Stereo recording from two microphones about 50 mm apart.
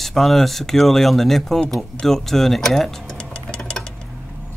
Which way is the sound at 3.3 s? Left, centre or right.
Centre.